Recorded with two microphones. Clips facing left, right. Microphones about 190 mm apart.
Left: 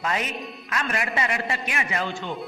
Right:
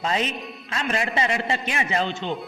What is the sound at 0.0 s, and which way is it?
A man's voice, 25° right (ahead or behind).